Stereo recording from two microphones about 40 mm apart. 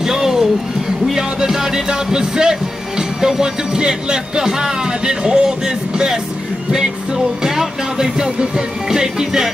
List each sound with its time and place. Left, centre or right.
0.0 s a sound: centre
1.4 s music: centre
3.0 s speech: centre
7.4 s music: centre
8.9 s speech: centre